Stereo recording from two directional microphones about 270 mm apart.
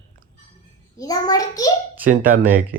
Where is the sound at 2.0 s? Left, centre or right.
Right.